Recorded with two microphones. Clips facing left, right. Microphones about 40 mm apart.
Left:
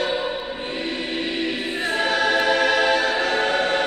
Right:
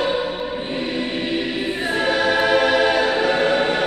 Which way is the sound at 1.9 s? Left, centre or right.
Centre.